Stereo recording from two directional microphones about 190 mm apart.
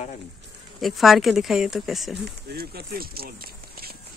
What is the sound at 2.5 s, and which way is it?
Speech, 55° right (ahead or behind).